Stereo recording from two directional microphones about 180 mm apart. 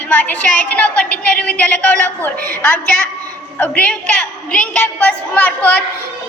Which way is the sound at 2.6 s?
10° left (ahead or behind).